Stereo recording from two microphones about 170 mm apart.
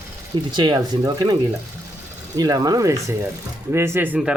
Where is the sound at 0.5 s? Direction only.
25° right (ahead or behind).